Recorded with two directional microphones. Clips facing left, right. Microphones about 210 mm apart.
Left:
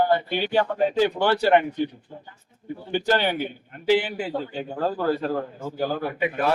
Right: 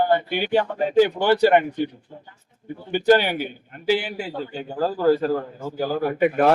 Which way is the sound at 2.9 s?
15° right (ahead or behind).